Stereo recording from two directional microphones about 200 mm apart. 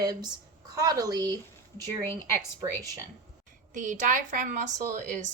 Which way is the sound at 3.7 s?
40° right (ahead or behind).